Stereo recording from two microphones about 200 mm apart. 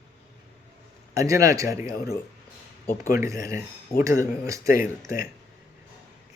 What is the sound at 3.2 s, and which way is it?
A man's voice, 15° right (ahead or behind).